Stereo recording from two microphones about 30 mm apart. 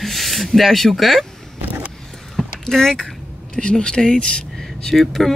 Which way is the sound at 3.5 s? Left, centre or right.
Left.